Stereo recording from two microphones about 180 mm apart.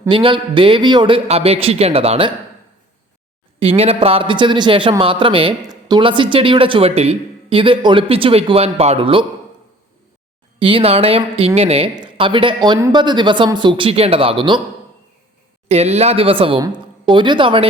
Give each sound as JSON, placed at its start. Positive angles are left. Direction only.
{"t": 0.1, "sound": "a man's voice", "side_deg": -30}
{"t": 3.6, "sound": "a man's voice", "side_deg": -35}
{"t": 10.6, "sound": "a woman's voice", "side_deg": -30}
{"t": 15.7, "sound": "a man's voice", "side_deg": -35}